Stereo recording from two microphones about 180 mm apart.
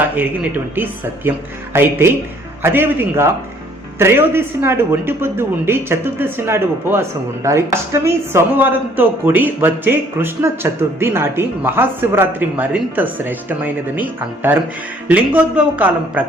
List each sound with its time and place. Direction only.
0.2 s speech: 10° right (ahead or behind)